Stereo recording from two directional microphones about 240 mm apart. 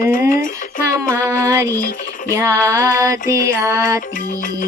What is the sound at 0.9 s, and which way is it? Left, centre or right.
Music, centre.